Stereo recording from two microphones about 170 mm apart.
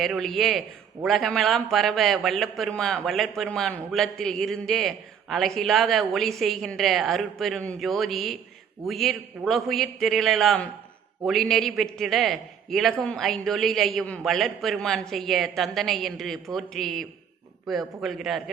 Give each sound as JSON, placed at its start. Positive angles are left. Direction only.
{"t": 0.0, "sound": "a man's voice", "side_deg": 0}